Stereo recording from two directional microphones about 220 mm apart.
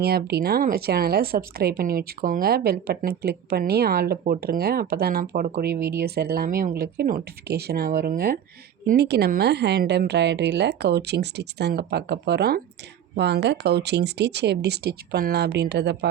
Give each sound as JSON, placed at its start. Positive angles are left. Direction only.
{"t": 0.0, "sound": "a woman's voice", "side_deg": -45}